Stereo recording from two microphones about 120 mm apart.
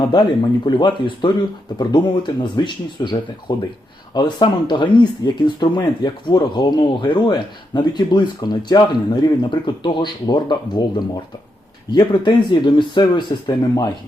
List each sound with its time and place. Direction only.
0.0 s speech: 35° left (ahead or behind)
11.9 s speech: 40° left (ahead or behind)